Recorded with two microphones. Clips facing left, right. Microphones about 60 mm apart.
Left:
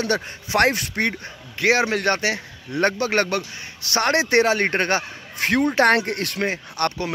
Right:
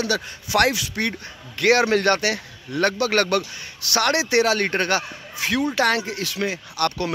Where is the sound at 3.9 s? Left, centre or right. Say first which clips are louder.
Left 1 dB; left.